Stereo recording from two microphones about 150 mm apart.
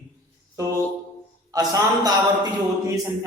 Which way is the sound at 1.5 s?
25° right (ahead or behind).